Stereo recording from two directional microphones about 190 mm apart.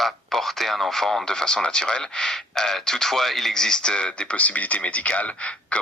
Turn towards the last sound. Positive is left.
turn(degrees=5)  # may be behind; listen again after turning